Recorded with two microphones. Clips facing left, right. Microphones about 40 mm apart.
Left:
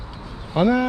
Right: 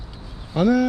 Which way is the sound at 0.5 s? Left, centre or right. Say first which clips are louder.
Even; left.